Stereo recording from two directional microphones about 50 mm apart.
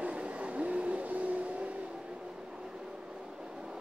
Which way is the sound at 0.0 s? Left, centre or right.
Right.